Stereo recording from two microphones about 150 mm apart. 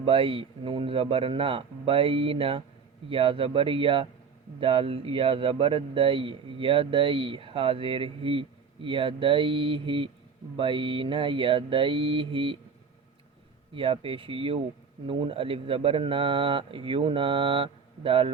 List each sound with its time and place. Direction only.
0.0 s a man's voice: 40° right (ahead or behind)
13.7 s a man's voice: 35° right (ahead or behind)